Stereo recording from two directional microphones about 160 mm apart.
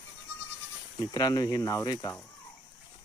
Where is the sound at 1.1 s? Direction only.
25° left (ahead or behind).